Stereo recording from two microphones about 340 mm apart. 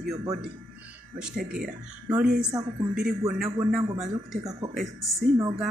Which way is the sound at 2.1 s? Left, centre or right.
Centre.